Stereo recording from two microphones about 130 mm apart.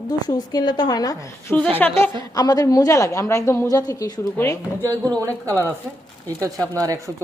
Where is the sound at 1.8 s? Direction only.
10° left (ahead or behind).